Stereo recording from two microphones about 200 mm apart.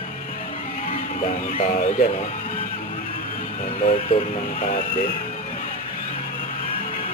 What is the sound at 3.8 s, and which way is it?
Speech, 35° left (ahead or behind).